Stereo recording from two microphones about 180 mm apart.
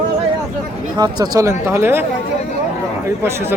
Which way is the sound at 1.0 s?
20° right (ahead or behind).